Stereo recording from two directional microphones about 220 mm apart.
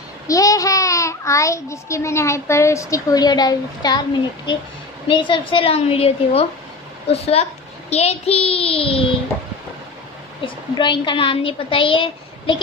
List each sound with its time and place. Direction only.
0.3 s a child's voice: 15° left (ahead or behind)
5.0 s a woman's voice: 20° left (ahead or behind)
10.4 s a woman's voice: 20° left (ahead or behind)